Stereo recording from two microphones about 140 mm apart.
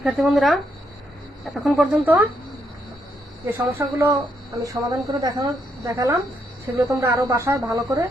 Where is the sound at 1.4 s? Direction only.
Centre (ahead or behind).